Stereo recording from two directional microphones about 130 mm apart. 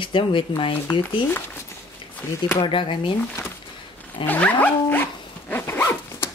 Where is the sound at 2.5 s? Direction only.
40° left (ahead or behind).